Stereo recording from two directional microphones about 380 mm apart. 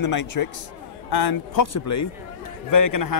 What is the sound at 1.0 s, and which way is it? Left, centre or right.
Speech, left.